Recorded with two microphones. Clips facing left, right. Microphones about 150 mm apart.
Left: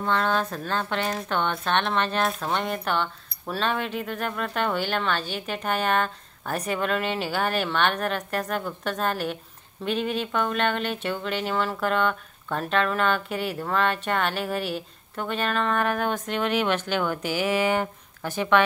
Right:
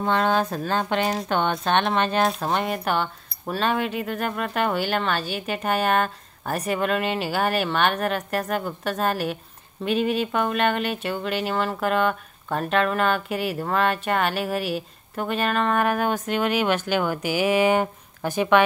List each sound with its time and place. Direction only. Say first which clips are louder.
0.0 s speech: right 3 dB; 15° right (ahead or behind)